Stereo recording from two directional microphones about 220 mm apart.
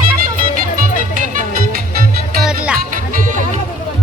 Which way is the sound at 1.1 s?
35° right (ahead or behind).